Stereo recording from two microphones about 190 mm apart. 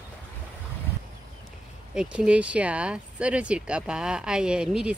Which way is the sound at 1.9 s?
5° right (ahead or behind).